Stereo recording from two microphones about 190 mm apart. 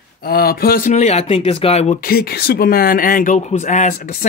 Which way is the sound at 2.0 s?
55° left (ahead or behind).